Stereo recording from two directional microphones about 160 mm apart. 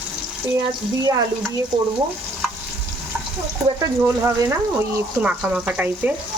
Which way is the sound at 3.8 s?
15° right (ahead or behind).